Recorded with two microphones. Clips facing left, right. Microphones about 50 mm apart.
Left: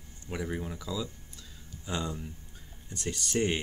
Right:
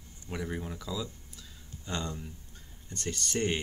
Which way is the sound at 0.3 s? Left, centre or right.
Centre.